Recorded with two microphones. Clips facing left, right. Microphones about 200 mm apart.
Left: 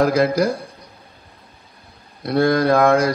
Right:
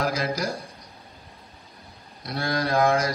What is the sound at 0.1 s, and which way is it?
Speech, 60° left (ahead or behind).